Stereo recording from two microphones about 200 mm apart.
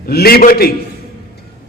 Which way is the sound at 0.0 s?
50° left (ahead or behind).